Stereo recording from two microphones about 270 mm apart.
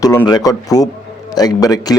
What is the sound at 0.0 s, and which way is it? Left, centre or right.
Speech, centre.